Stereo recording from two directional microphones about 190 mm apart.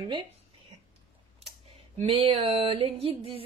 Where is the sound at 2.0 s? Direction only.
30° right (ahead or behind).